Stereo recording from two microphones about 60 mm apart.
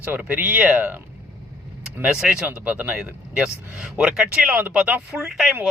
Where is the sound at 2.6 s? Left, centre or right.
Right.